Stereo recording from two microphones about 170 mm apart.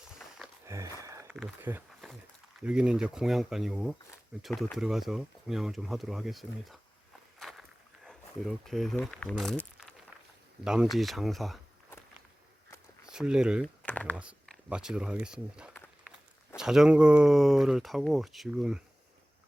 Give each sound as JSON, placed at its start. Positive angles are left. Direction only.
{"t": 0.6, "sound": "a sound", "side_deg": -20}
{"t": 1.3, "sound": "speech", "side_deg": -5}
{"t": 7.3, "sound": "walk", "side_deg": 0}
{"t": 8.0, "sound": "speech", "side_deg": 0}
{"t": 13.1, "sound": "speech", "side_deg": -5}
{"t": 13.8, "sound": "typing", "side_deg": 10}
{"t": 14.7, "sound": "speech", "side_deg": -5}